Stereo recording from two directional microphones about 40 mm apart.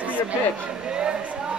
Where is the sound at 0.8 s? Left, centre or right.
Right.